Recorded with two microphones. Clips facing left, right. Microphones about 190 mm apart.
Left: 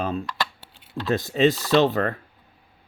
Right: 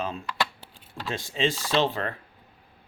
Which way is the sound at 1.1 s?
40° left (ahead or behind).